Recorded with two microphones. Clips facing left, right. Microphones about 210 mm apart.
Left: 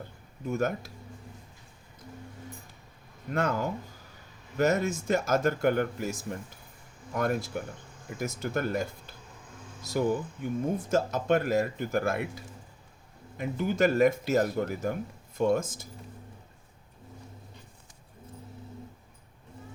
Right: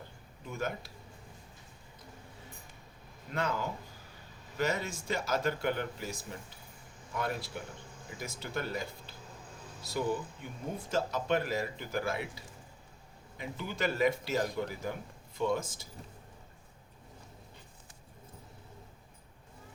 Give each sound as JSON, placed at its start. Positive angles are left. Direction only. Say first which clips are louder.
{"t": 0.4, "sound": "speech", "louder": "left 8 dB", "side_deg": 45}
{"t": 3.3, "sound": "speech", "louder": "left 5 dB", "side_deg": 45}